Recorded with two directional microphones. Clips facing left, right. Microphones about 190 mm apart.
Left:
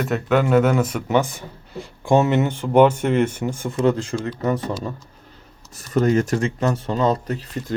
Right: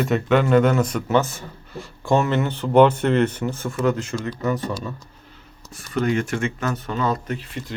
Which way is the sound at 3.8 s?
30° left (ahead or behind).